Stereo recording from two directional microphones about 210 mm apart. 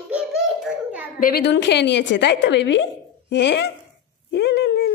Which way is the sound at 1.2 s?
50° left (ahead or behind).